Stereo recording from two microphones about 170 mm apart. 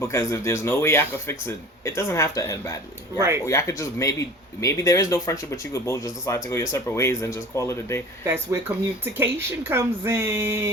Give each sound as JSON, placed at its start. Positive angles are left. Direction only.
{"t": 0.0, "sound": "speech", "side_deg": 15}
{"t": 3.2, "sound": "speech", "side_deg": -15}
{"t": 3.4, "sound": "speech", "side_deg": 15}
{"t": 8.2, "sound": "speech", "side_deg": -15}